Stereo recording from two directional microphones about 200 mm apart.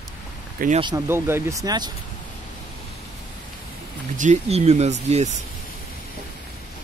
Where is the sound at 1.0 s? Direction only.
10° right (ahead or behind).